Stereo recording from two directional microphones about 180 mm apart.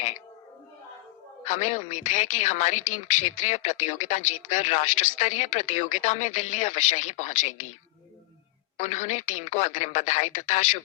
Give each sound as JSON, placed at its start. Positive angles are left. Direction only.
{"t": 1.5, "sound": "speech", "side_deg": 40}
{"t": 8.8, "sound": "speech", "side_deg": 40}